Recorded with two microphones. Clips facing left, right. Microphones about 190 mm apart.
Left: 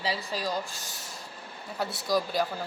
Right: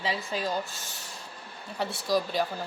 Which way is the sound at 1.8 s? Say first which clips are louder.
Right 1 dB; centre (ahead or behind).